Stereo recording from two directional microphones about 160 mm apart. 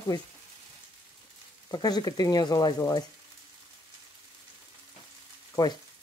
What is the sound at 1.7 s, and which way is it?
Speech, 25° left (ahead or behind).